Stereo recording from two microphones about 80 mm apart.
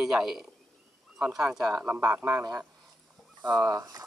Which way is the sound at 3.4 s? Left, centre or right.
Centre.